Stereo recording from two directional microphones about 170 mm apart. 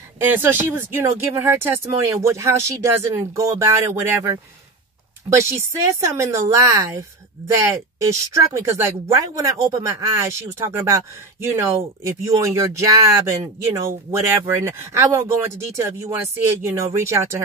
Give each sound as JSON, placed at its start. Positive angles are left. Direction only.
{"t": 0.2, "sound": "speech", "side_deg": -10}
{"t": 6.0, "sound": "speech", "side_deg": -15}